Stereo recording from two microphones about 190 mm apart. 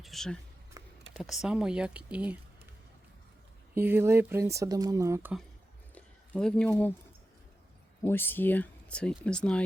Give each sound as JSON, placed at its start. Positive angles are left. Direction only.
{"t": 0.0, "sound": "speech", "side_deg": 0}
{"t": 0.8, "sound": "a sound", "side_deg": -15}
{"t": 1.1, "sound": "speech", "side_deg": 0}
{"t": 3.8, "sound": "speech", "side_deg": -10}
{"t": 5.9, "sound": "a sound", "side_deg": 5}
{"t": 6.7, "sound": "speech", "side_deg": 10}
{"t": 8.0, "sound": "speech", "side_deg": 10}